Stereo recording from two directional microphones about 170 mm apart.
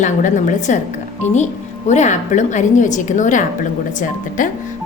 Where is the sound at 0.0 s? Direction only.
50° left (ahead or behind).